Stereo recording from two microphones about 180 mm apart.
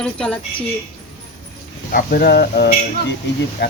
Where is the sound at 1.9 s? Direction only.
55° left (ahead or behind).